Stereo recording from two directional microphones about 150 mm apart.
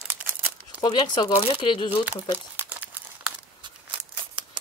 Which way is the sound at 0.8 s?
30° left (ahead or behind).